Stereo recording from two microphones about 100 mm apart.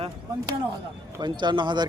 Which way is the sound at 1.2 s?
50° right (ahead or behind).